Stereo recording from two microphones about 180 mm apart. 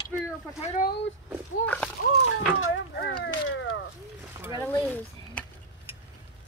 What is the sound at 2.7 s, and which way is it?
Speech, 70° left (ahead or behind).